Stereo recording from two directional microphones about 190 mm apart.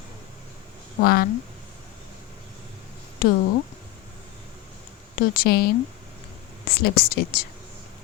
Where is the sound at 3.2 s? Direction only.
50° left (ahead or behind).